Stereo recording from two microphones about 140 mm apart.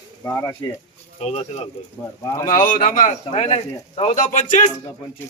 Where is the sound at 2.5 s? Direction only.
80° left.